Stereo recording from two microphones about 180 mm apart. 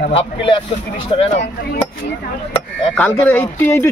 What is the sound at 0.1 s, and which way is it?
Speech, 30° left (ahead or behind).